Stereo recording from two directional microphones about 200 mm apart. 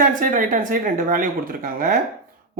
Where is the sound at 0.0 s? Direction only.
40° right (ahead or behind).